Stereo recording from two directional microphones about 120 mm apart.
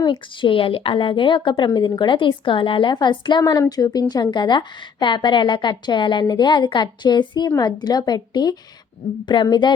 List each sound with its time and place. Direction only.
0.0 s a woman's voice: 45° left (ahead or behind)